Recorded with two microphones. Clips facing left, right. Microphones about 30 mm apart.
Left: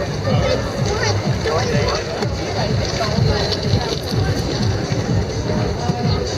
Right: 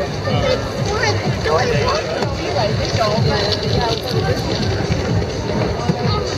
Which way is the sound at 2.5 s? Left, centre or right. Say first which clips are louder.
Right 4 dB; centre.